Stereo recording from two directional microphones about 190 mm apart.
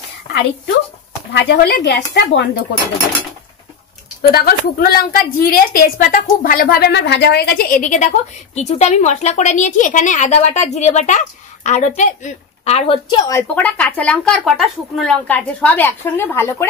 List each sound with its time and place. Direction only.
1.3 s speech: 65° left (ahead or behind)
4.2 s a woman's voice: 55° left (ahead or behind); by 13.2 s 30° left (ahead or behind)
13.3 s speech: 10° left (ahead or behind)